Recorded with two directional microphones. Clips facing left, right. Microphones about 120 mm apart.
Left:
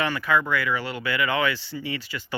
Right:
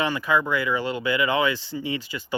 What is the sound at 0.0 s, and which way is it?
Speech, 15° right (ahead or behind).